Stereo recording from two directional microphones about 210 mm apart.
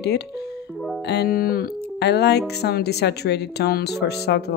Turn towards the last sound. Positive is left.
turn(degrees=50)  # may be behind; listen again after turning